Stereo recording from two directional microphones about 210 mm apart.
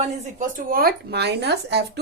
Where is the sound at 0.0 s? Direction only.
40° right (ahead or behind).